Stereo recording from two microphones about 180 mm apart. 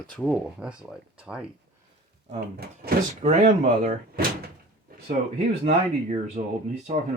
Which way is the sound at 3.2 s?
45° right (ahead or behind).